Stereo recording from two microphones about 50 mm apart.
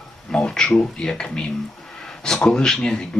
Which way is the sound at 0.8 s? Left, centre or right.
Centre.